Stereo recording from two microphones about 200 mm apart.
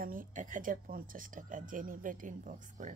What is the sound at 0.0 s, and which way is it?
Speech, 45° right (ahead or behind).